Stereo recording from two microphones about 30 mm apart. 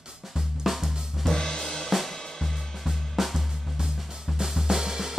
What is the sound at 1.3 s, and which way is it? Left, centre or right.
Cymbal, centre.